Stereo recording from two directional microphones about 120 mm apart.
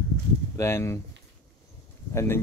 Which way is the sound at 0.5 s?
20° left (ahead or behind).